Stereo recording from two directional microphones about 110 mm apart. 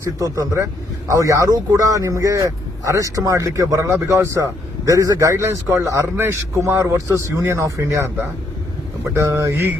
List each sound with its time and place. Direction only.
0.5 s speech: 30° right (ahead or behind)
9.1 s speech: 25° right (ahead or behind)